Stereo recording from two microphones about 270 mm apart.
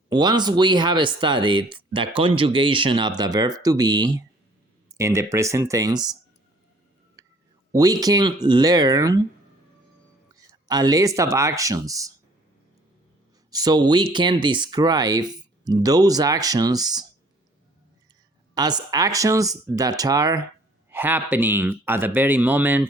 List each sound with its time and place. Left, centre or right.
0.1 s speech: centre
7.2 s a sound: centre
7.7 s speech: centre
10.3 s speech: centre
13.5 s speech: centre
18.5 s speech: centre